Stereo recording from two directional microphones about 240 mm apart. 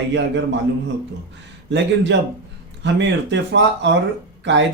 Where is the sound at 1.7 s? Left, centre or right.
Right.